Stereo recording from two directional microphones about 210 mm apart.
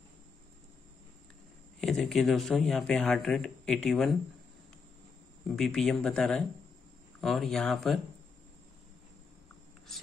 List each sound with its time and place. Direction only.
1.8 s speech: centre (ahead or behind)
5.6 s speech: centre (ahead or behind)